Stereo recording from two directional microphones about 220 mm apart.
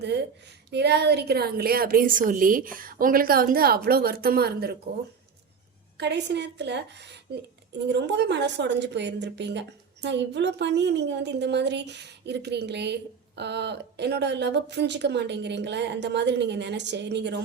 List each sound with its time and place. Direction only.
0.7 s a woman's voice: 50° right (ahead or behind)
6.0 s a woman's voice: 50° right (ahead or behind)